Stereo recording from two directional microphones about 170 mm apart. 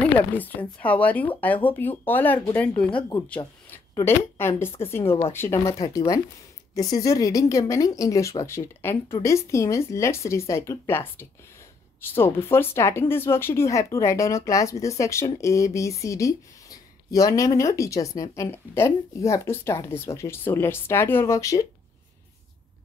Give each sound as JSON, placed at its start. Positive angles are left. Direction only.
{"t": 0.4, "sound": "speech", "side_deg": 10}